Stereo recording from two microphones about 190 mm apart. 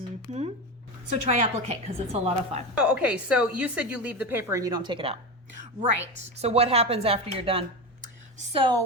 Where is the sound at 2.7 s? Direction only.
5° right (ahead or behind); by 5.1 s 25° right (ahead or behind).